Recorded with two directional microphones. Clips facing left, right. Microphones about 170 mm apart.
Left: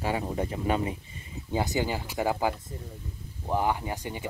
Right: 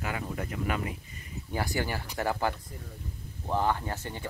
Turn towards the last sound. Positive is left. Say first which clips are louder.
# left 2 dB
turn(degrees=15)  # may be behind; listen again after turning